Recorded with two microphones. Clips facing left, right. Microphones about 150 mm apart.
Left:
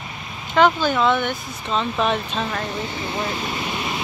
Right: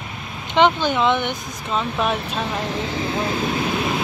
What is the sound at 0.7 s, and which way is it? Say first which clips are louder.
Speech: even; 20° right (ahead or behind).